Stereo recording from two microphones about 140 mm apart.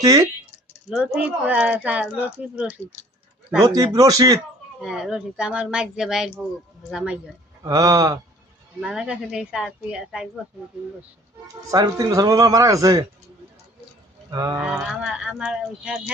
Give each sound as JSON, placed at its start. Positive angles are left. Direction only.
{"t": 0.0, "sound": "speech", "side_deg": -25}
{"t": 0.9, "sound": "speech", "side_deg": -5}
{"t": 3.7, "sound": "speech", "side_deg": -25}
{"t": 4.8, "sound": "speech", "side_deg": -5}
{"t": 7.6, "sound": "speech", "side_deg": -25}
{"t": 8.8, "sound": "speech", "side_deg": -5}
{"t": 11.7, "sound": "speech", "side_deg": -25}
{"t": 14.3, "sound": "speech", "side_deg": -25}
{"t": 14.5, "sound": "speech", "side_deg": -10}